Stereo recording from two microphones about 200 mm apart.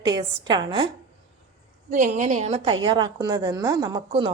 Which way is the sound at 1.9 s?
40° right (ahead or behind).